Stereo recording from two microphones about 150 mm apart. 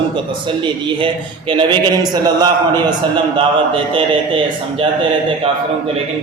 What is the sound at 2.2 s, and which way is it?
Speech, 25° right (ahead or behind).